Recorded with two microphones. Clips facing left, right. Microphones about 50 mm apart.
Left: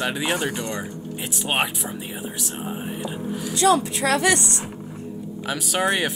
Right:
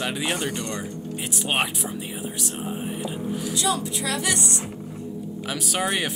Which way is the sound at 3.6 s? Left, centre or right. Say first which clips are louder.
Left 9 dB; left.